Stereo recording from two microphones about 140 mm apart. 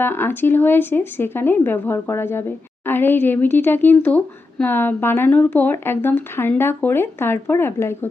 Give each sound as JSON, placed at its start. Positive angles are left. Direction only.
{"t": 0.0, "sound": "speech", "side_deg": 15}